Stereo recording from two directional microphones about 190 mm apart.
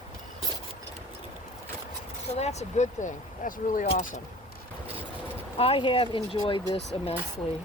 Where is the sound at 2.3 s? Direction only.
35° left (ahead or behind).